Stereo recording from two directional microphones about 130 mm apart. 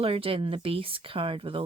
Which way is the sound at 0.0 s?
45° right (ahead or behind).